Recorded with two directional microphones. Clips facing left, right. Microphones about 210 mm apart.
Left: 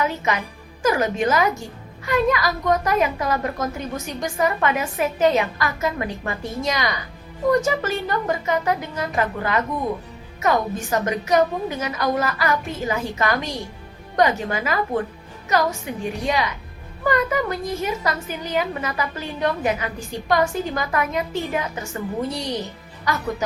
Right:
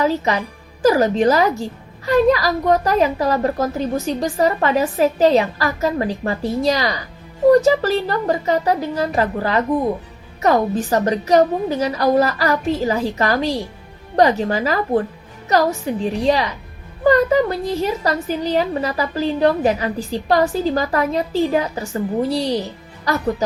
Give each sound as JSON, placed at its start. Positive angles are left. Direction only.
{"t": 0.0, "sound": "a woman's voice", "side_deg": -35}